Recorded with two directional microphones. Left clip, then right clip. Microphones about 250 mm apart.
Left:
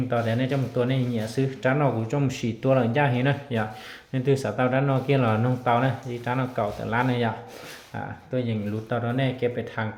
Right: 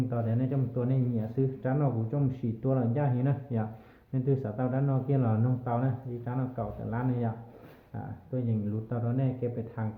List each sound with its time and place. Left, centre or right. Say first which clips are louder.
0.1 s speech: left 8 dB; centre
8.4 s speech: left 6 dB; centre